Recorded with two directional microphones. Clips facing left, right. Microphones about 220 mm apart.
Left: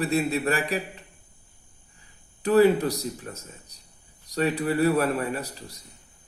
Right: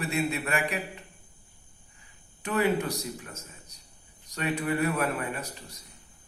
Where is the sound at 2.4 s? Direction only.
35° left (ahead or behind).